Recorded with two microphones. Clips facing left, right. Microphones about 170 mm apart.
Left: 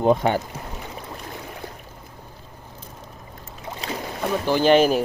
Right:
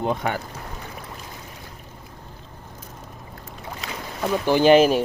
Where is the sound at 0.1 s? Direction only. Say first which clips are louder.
Left 6 dB; 30° left (ahead or behind).